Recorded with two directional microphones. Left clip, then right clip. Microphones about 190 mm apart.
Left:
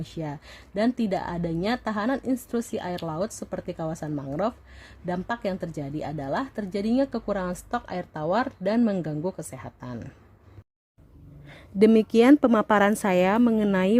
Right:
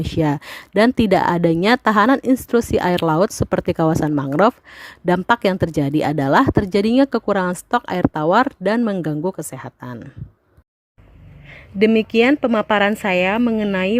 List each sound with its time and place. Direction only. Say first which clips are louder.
0.0 s speech: right 15 dB; 45° right (ahead or behind)
11.5 s a woman's voice: right 3 dB; 15° left (ahead or behind)